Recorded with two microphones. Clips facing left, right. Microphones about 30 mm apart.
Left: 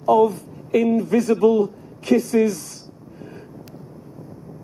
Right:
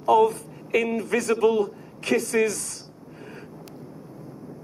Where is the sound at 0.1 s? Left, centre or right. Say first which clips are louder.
Left 2 dB; right.